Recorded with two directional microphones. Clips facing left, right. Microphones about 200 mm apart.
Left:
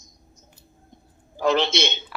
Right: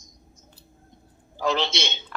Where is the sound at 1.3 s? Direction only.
55° left (ahead or behind).